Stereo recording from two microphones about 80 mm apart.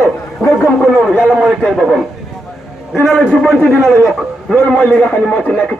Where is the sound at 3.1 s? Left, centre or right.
Centre.